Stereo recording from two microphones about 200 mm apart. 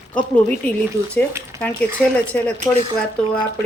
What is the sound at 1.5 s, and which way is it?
Speech, 15° right (ahead or behind).